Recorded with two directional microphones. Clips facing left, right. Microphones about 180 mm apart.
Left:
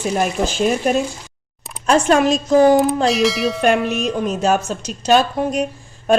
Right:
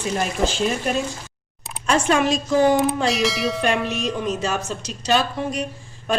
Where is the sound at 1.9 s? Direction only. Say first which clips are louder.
Left 5 dB; 40° left (ahead or behind).